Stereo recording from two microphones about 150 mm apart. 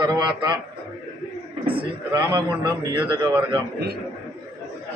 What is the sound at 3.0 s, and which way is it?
Speech, 35° right (ahead or behind).